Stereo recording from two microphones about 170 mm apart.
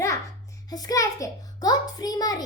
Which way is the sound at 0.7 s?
20° left (ahead or behind).